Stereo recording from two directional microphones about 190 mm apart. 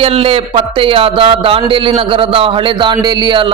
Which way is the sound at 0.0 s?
30° right (ahead or behind).